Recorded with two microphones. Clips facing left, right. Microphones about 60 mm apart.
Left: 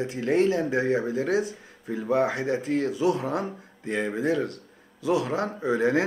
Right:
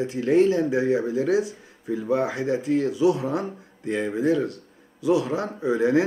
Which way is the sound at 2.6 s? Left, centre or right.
Left.